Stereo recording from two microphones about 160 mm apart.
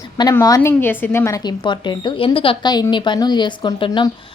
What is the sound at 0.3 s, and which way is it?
A woman's voice, 20° left (ahead or behind).